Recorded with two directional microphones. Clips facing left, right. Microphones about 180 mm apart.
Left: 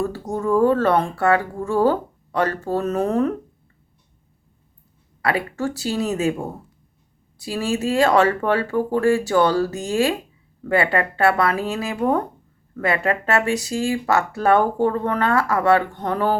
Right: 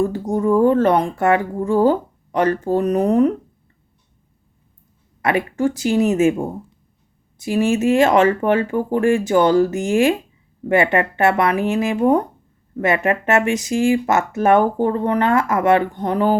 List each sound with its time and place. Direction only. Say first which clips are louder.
0.0 s speech: right 5 dB; 15° right (ahead or behind)
5.2 s speech: right 4 dB; 20° right (ahead or behind)